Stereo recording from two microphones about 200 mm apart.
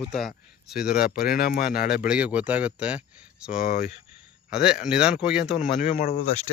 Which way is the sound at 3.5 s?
50° left (ahead or behind).